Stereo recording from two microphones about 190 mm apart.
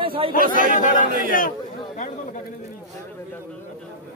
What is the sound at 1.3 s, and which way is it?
Speech, 45° left (ahead or behind).